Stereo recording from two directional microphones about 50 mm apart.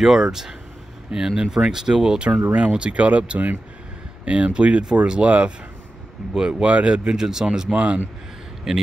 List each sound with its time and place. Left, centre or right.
0.0 s speech: centre
5.2 s speech: right
6.3 s speech: centre
7.7 s speech: right
8.7 s speech: centre